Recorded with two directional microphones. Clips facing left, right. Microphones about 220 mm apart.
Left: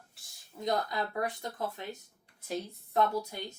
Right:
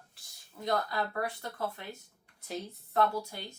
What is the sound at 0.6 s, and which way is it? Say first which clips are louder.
Speech: even; 20° left (ahead or behind).